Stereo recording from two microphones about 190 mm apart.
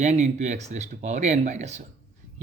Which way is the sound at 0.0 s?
35° right (ahead or behind).